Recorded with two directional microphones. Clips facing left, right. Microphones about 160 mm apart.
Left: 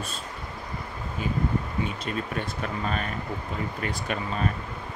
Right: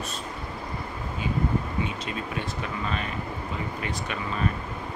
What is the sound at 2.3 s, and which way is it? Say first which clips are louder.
Speech: left 1 dB; 45° left (ahead or behind).